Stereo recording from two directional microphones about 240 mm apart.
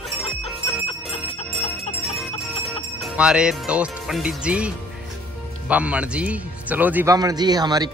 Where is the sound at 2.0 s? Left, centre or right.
Centre.